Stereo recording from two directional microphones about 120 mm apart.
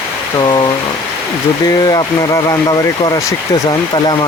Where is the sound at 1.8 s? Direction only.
35° left (ahead or behind).